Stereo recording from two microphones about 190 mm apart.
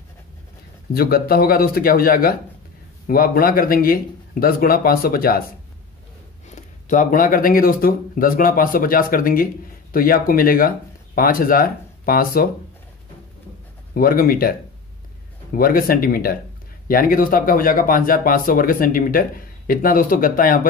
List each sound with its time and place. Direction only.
0.9 s speech: 55° left (ahead or behind)
6.5 s speech: 40° left (ahead or behind)
13.9 s speech: 50° left (ahead or behind)
15.5 s speech: 50° left (ahead or behind)